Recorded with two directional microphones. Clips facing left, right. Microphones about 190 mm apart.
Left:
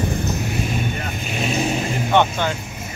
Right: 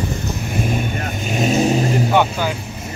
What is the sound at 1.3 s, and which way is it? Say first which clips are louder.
Vehicle: right 6 dB; 40° right (ahead or behind).